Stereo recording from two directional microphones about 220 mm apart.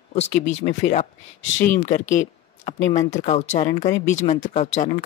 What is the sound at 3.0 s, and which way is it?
Speech, 30° left (ahead or behind).